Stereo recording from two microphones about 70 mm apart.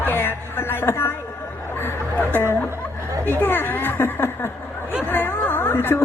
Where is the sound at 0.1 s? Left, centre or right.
Left.